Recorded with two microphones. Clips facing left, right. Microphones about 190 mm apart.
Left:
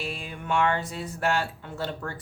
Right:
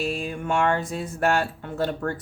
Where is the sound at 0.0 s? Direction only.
45° right (ahead or behind).